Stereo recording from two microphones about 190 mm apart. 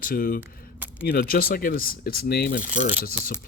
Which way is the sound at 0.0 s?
45° left (ahead or behind).